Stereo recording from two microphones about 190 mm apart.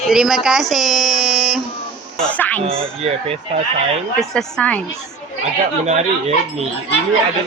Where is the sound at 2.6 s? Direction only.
30° right (ahead or behind).